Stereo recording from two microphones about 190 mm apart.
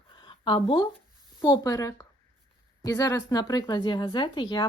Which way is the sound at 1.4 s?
15° left (ahead or behind).